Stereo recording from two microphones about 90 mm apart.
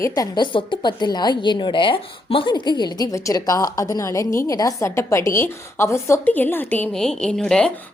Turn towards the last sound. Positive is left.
turn(degrees=10)  # may be behind; listen again after turning